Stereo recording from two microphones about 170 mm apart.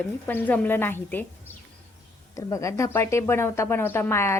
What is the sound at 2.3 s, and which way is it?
A woman's voice, 20° left (ahead or behind).